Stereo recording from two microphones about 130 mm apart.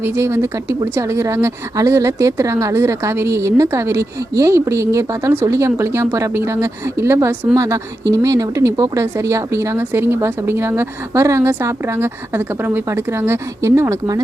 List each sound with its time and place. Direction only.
0.0 s speech: 20° right (ahead or behind)